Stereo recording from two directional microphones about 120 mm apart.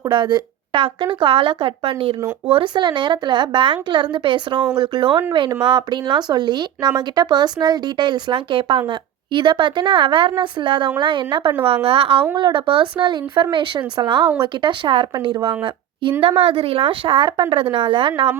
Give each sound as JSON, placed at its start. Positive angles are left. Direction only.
{"t": 0.1, "sound": "speech", "side_deg": -35}